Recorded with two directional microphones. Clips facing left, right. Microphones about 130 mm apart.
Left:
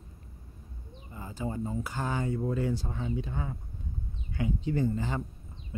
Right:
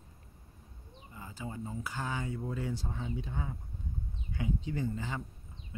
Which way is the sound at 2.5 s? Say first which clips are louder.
Left 6 dB; 55° left (ahead or behind).